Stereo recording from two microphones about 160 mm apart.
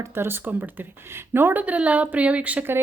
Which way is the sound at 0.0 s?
15° right (ahead or behind).